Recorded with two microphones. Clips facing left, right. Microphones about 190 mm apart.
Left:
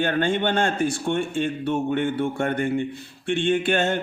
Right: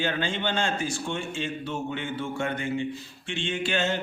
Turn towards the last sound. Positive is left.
turn(degrees=55)  # may be behind; listen again after turning